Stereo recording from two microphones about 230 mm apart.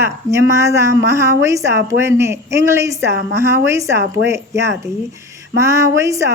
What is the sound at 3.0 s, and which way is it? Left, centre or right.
Speech, right.